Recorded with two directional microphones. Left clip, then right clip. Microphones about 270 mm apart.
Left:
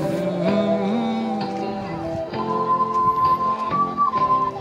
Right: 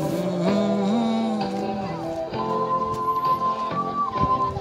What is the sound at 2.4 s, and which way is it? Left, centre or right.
Music, left.